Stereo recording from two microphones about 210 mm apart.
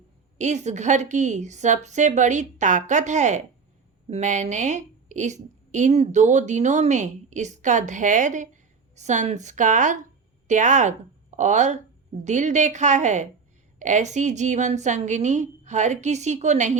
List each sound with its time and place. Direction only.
0.3 s a woman's voice: 35° right (ahead or behind)